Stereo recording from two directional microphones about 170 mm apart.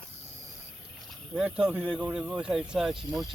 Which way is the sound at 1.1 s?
5° right (ahead or behind).